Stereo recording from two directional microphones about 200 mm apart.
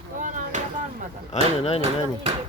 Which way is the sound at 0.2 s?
40° right (ahead or behind).